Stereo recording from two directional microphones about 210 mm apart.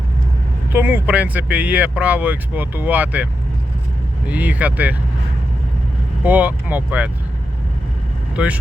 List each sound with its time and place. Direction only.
0.7 s speech: 10° right (ahead or behind)
4.3 s speech: 5° right (ahead or behind)
6.2 s speech: 10° right (ahead or behind)